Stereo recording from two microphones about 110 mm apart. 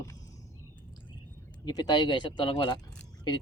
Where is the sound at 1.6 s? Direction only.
35° left (ahead or behind).